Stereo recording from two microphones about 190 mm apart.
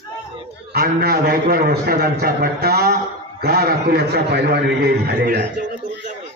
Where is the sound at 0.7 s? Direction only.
55° right (ahead or behind).